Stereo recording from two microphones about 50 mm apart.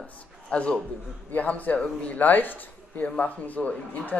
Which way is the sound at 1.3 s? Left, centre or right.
Left.